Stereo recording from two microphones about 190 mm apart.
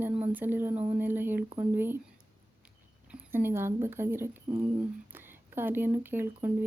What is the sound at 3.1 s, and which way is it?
Speech, 10° right (ahead or behind).